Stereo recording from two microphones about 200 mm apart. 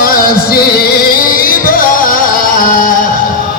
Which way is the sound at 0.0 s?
50° left (ahead or behind).